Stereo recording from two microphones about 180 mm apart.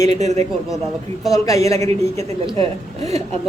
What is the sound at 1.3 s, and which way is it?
A man's voice, 20° left (ahead or behind).